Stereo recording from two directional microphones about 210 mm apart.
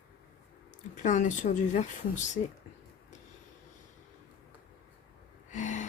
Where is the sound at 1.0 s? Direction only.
35° left (ahead or behind).